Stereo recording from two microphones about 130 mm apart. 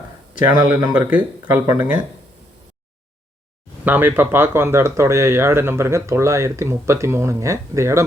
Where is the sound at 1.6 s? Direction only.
25° right (ahead or behind).